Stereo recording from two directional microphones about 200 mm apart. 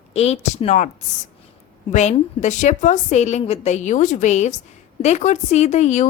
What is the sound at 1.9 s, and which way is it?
A woman's voice, 35° left (ahead or behind).